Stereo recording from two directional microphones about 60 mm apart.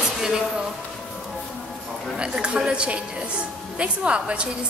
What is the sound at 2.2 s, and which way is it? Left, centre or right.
A woman's voice, centre.